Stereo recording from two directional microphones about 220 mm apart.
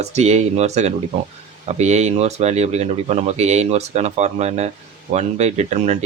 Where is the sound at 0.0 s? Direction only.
30° right (ahead or behind).